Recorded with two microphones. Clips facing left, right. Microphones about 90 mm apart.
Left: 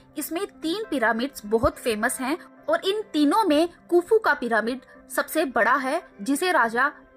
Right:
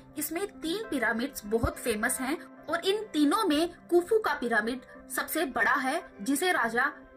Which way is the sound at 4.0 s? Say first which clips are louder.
Left 6 dB; 90° left.